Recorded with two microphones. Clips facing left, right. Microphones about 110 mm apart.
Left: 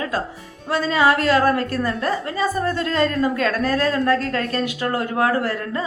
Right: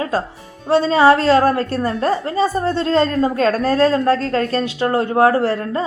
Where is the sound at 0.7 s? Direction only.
30° right (ahead or behind).